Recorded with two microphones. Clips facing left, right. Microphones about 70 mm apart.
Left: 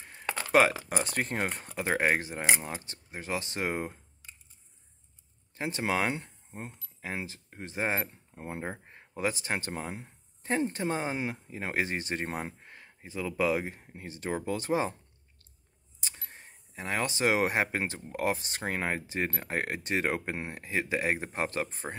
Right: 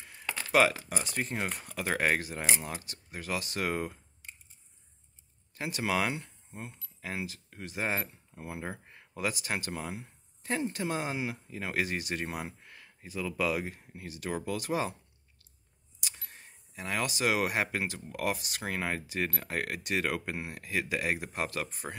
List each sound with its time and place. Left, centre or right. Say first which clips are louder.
0.0 s keys jangling: left 3 dB; left
0.9 s speech: left 3 dB; left
1.5 s speech: left 2 dB; left
5.5 s speech: left 1 dB; left
16.0 s speech: left 1 dB; left